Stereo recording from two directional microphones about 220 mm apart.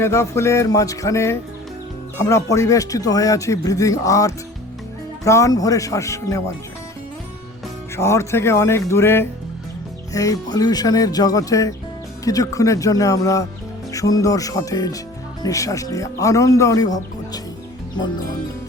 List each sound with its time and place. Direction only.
0.0 s speech: 10° left (ahead or behind)
7.9 s speech: 15° left (ahead or behind)